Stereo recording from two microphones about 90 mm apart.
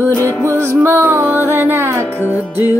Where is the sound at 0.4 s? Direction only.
30° right (ahead or behind).